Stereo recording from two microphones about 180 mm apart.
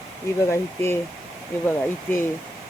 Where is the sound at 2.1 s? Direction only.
10° left (ahead or behind).